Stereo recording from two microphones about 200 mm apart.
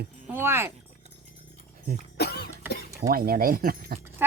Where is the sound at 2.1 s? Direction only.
55° left (ahead or behind).